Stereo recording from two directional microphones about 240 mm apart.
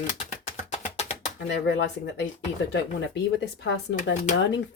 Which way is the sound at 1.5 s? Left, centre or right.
Left.